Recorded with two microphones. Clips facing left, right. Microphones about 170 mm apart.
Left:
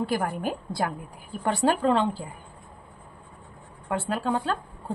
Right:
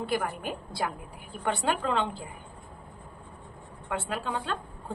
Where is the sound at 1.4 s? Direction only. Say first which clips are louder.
Left 5 dB; 40° left (ahead or behind).